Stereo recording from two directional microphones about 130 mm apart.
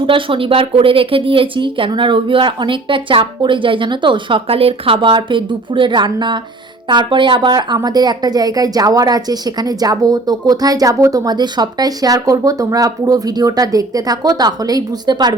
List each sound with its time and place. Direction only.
0.0 s a woman's voice: 40° right (ahead or behind)